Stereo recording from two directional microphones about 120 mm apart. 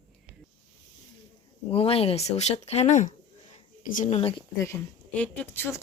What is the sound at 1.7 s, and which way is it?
Speech, 55° left (ahead or behind).